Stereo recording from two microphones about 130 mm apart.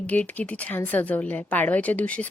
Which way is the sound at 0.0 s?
10° left (ahead or behind).